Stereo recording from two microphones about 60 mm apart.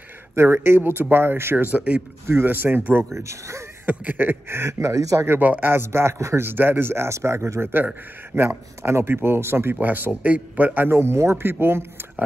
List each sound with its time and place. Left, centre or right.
0.4 s speech: right
0.7 s a man's voice: right
3.1 s speech: right
3.9 s speech: right
5.2 s a man's voice: right
6.4 s speech: right
7.6 s a man's voice: right